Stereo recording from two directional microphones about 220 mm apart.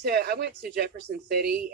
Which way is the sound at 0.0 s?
45° right (ahead or behind).